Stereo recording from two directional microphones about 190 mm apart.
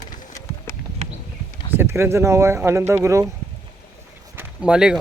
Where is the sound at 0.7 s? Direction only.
10° left (ahead or behind).